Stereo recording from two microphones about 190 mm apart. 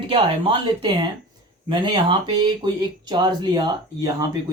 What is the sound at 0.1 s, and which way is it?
Speech, 25° right (ahead or behind).